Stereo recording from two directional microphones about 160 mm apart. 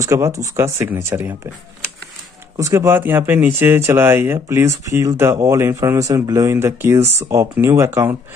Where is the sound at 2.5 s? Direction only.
20° right (ahead or behind).